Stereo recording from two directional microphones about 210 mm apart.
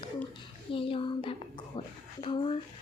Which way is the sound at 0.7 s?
25° left (ahead or behind).